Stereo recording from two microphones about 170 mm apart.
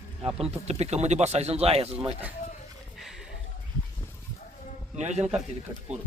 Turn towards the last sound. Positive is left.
turn(degrees=-40)  # may be behind; listen again after turning